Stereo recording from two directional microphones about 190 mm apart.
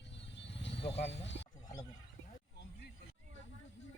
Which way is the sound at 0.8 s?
30° left (ahead or behind).